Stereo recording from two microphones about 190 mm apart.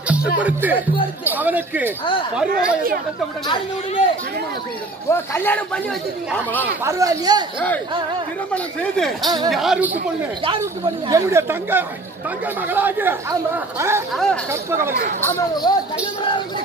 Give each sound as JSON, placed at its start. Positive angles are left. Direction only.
{"t": 0.4, "sound": "speech", "side_deg": -10}
{"t": 2.5, "sound": "speech", "side_deg": -50}
{"t": 5.1, "sound": "a man's voice", "side_deg": 10}
{"t": 6.8, "sound": "speech", "side_deg": -15}
{"t": 8.5, "sound": "speech", "side_deg": 5}
{"t": 10.6, "sound": "speech", "side_deg": -15}
{"t": 14.1, "sound": "speech", "side_deg": 5}
{"t": 14.5, "sound": "speech", "side_deg": -15}
{"t": 15.7, "sound": "speech", "side_deg": 20}